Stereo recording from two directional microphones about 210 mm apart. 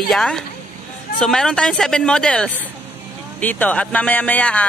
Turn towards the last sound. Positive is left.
turn(degrees=5)  # may be behind; listen again after turning